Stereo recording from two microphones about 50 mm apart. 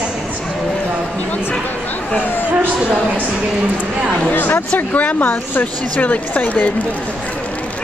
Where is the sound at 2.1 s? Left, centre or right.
Left.